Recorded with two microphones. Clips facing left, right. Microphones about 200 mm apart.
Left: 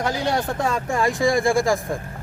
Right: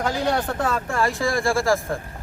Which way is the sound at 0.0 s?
10° left (ahead or behind).